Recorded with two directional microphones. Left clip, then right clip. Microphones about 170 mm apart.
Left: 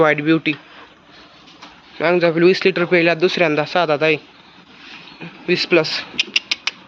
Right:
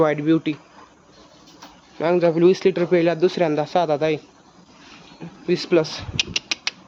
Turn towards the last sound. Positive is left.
turn(degrees=-25)  # may be behind; listen again after turning